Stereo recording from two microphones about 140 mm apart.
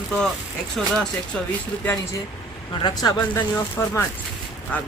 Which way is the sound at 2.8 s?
30° left (ahead or behind).